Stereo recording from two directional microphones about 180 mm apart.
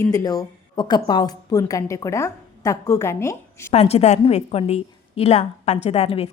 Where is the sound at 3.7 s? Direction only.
35° left (ahead or behind).